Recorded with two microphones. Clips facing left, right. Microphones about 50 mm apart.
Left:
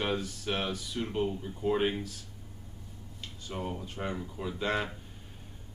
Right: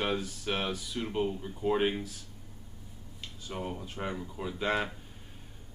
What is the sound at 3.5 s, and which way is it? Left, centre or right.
Speech, centre.